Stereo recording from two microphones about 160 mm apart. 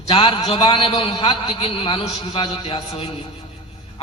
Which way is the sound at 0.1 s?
35° left (ahead or behind).